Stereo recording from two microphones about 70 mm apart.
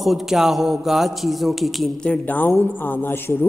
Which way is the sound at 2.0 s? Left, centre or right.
Left.